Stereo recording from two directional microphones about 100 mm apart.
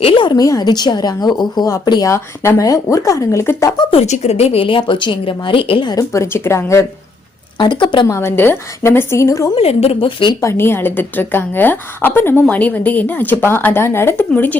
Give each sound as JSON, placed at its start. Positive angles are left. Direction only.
{"t": 0.0, "sound": "a sound", "side_deg": 55}
{"t": 0.3, "sound": "a woman's voice", "side_deg": 35}
{"t": 2.0, "sound": "speech", "side_deg": 25}
{"t": 3.9, "sound": "a woman's voice", "side_deg": 90}
{"t": 5.9, "sound": "a woman's voice", "side_deg": 30}
{"t": 7.6, "sound": "a woman's voice", "side_deg": 50}
{"t": 8.0, "sound": "a woman's voice", "side_deg": 30}
{"t": 9.6, "sound": "speech", "side_deg": 90}
{"t": 10.4, "sound": "a woman's voice", "side_deg": 25}